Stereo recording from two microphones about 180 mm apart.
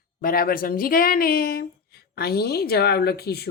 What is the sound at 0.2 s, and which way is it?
Speech, 55° left (ahead or behind).